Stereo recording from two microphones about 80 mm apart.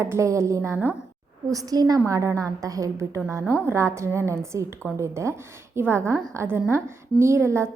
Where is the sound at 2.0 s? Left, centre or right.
Right.